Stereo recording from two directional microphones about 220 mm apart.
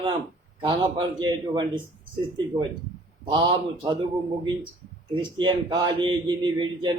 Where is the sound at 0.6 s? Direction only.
20° right (ahead or behind).